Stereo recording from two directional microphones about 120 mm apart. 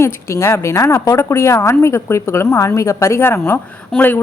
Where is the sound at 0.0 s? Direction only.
25° left (ahead or behind).